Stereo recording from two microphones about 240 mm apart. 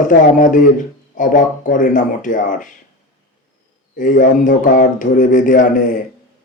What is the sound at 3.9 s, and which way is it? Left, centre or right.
Speech, left.